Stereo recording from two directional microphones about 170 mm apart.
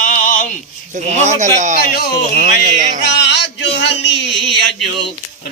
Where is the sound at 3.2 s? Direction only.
85° left.